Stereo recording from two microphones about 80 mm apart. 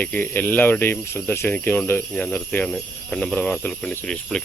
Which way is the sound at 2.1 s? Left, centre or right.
Centre.